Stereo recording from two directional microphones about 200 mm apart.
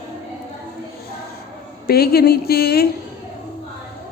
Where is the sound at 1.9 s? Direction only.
50° left (ahead or behind).